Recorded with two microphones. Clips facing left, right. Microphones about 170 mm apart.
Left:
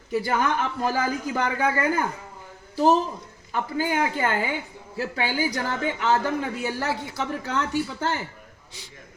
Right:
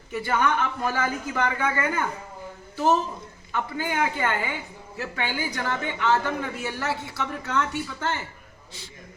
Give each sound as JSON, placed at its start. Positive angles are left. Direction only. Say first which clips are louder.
{"t": 0.1, "sound": "a woman's voice", "louder": "left 1 dB", "side_deg": 35}